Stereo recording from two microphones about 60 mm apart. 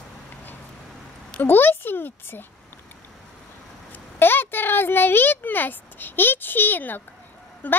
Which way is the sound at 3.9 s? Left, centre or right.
Left.